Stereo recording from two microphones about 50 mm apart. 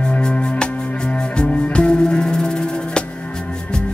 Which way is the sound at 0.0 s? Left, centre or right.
Left.